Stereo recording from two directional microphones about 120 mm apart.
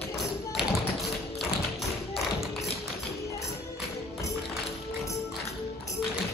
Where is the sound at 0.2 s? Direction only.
Centre (ahead or behind).